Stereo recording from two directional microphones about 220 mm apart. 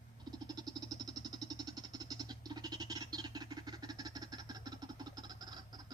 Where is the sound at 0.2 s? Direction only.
15° right (ahead or behind).